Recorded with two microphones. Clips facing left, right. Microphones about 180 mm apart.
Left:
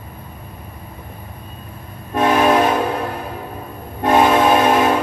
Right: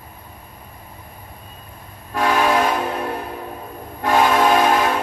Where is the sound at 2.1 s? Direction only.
25° left (ahead or behind).